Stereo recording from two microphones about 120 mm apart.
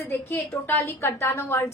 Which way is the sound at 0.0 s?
25° left (ahead or behind).